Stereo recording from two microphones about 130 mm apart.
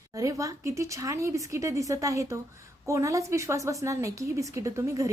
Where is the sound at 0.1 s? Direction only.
25° right (ahead or behind).